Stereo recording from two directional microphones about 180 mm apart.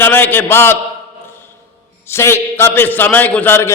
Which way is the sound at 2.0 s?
15° left (ahead or behind).